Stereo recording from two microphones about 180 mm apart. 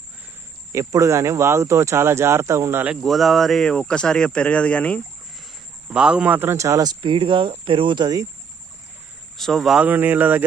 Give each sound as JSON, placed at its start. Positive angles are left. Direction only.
{"t": 0.7, "sound": "speech", "side_deg": -15}
{"t": 5.9, "sound": "speech", "side_deg": -5}
{"t": 9.4, "sound": "speech", "side_deg": 0}